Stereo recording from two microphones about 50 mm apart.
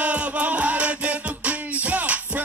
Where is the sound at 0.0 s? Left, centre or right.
Right.